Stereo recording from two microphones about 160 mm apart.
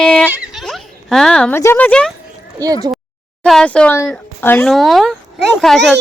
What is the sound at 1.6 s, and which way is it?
Speech, 15° left (ahead or behind).